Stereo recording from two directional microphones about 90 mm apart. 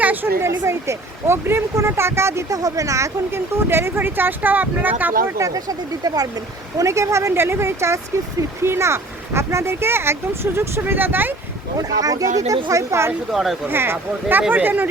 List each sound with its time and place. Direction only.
0.0 s speech: 20° right (ahead or behind)
0.4 s speech: 30° right (ahead or behind)
5.4 s speech: 45° right (ahead or behind)
6.7 s speech: 35° right (ahead or behind)
11.8 s speech: 45° right (ahead or behind)
13.3 s speech: 5° right (ahead or behind)
13.7 s speech: 25° right (ahead or behind)